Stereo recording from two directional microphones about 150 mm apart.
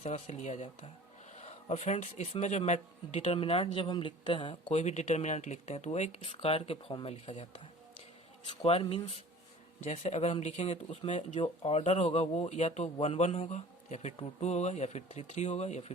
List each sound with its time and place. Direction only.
0.0 s speech: 50° left (ahead or behind); by 4.7 s 30° left (ahead or behind)
4.7 s speech: 50° left (ahead or behind)
11.3 s speech: 40° left (ahead or behind)